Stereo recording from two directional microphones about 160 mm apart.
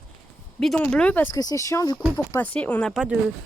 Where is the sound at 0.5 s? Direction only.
5° left (ahead or behind); by 2.0 s 20° left (ahead or behind).